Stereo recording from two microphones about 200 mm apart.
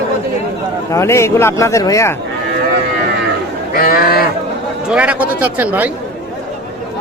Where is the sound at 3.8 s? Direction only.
45° left (ahead or behind).